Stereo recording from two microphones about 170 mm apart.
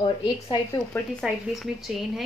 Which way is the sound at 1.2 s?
Centre (ahead or behind).